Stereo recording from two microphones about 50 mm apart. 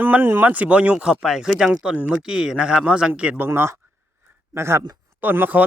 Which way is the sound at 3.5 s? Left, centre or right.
Right.